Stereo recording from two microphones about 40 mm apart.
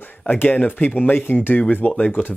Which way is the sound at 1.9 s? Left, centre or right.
Left.